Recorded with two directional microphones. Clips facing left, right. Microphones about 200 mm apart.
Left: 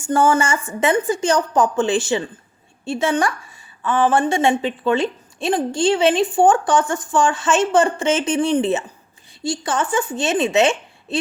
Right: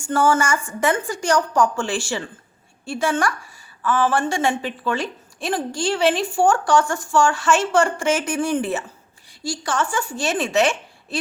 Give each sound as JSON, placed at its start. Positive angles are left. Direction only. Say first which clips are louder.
{"t": 0.0, "sound": "a woman's voice", "louder": "left 2 dB", "side_deg": 20}